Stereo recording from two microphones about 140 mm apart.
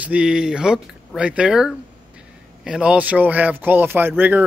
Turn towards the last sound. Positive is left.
turn(degrees=-15)  # may be behind; listen again after turning